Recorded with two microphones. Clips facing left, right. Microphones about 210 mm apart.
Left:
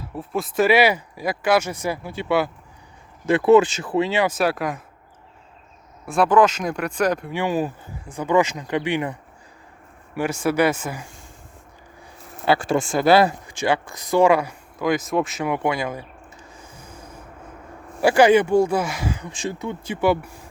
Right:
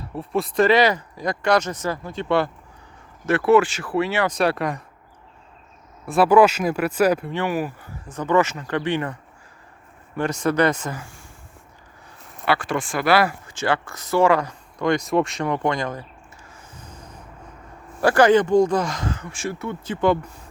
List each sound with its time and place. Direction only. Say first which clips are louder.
0.0 s speech: right 2 dB; centre (ahead or behind)
3.2 s speech: left 2 dB; 15° left (ahead or behind)
4.3 s speech: right 1 dB; 5° left (ahead or behind)
6.1 s speech: right 2 dB; 5° right (ahead or behind)
7.3 s speech: left 1 dB; 15° left (ahead or behind)
10.2 s speech: even; 10° left (ahead or behind)
12.5 s speech: left 3 dB; 25° left (ahead or behind); by 16.0 s 10° left (ahead or behind)
16.6 s a sound: left 1 dB; 10° left (ahead or behind)
18.0 s speech: left 1 dB; 10° left (ahead or behind)